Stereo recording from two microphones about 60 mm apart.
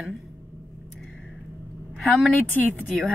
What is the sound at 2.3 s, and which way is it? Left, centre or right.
Speech, left.